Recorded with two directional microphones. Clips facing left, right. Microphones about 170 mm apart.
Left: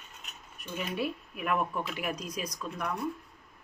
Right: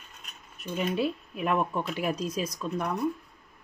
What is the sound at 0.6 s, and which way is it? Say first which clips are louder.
A woman's voice: right 5 dB; 25° right (ahead or behind).